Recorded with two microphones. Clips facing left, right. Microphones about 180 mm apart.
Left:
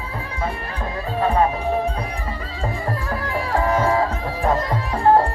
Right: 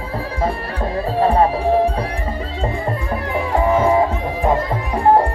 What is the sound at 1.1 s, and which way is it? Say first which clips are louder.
Music: right 4 dB; 35° right (ahead or behind).